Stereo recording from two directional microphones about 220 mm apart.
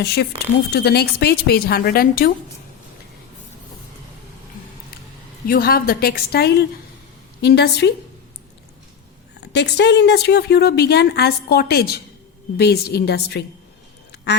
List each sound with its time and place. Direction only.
0.0 s speech: 50° left (ahead or behind)
5.5 s speech: 40° left (ahead or behind)
9.4 s speech: 50° left (ahead or behind)